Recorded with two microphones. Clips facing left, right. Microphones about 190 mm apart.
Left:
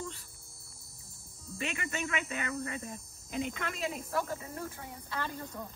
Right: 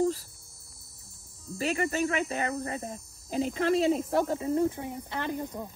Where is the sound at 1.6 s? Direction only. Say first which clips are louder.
Right 9 dB; 35° right (ahead or behind); by 5.7 s 20° right (ahead or behind).